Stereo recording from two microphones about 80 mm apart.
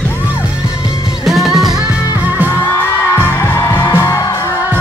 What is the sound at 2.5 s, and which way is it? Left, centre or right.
Music, left.